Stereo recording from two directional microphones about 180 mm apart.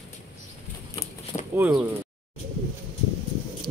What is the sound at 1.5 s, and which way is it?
Speech, 10° right (ahead or behind).